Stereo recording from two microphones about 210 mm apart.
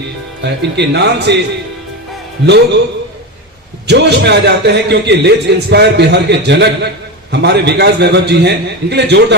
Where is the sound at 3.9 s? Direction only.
55° right (ahead or behind).